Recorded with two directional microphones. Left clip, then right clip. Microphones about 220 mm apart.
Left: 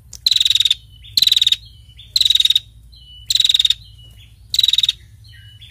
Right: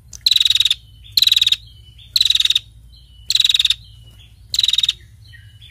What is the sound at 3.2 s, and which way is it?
Frog, 15° right (ahead or behind).